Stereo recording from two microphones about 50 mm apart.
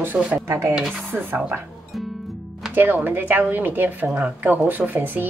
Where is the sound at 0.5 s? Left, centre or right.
Right.